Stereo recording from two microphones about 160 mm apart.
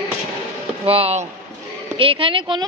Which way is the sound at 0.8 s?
35° right (ahead or behind).